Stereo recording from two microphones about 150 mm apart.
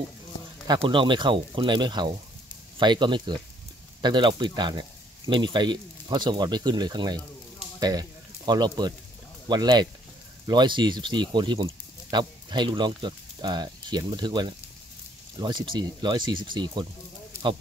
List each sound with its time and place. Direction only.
0.7 s speech: 35° right (ahead or behind)